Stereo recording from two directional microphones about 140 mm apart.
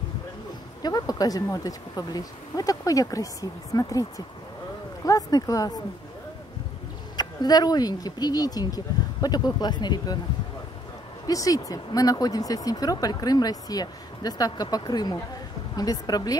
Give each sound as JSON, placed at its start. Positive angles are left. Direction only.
{"t": 0.8, "sound": "speech", "side_deg": 25}
{"t": 7.2, "sound": "speech", "side_deg": 30}
{"t": 11.2, "sound": "speech", "side_deg": 25}